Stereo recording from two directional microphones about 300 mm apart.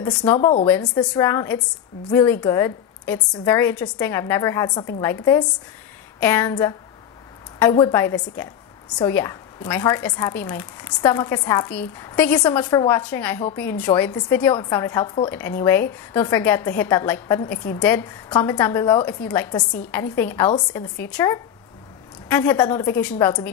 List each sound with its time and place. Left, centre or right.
0.0 s speech: centre
0.4 s speech: centre
0.7 s a woman's voice: centre